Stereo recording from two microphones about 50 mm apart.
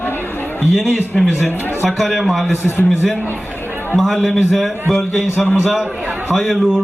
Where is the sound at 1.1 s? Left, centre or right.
Centre.